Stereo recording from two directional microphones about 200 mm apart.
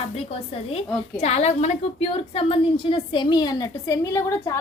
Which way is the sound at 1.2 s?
35° left (ahead or behind).